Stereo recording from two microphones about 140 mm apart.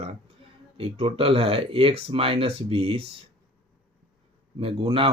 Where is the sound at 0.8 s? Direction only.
45° right (ahead or behind).